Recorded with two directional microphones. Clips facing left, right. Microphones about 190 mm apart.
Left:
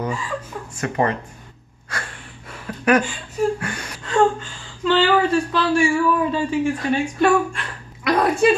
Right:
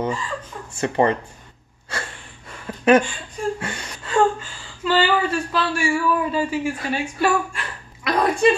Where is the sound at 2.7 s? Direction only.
25° right (ahead or behind).